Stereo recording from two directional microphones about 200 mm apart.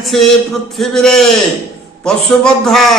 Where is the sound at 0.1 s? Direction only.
Centre (ahead or behind).